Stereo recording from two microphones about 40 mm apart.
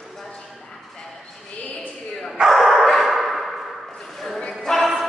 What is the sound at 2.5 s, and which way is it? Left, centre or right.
Dog, centre.